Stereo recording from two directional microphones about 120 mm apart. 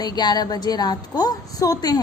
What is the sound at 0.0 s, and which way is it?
A woman's voice, 35° left (ahead or behind).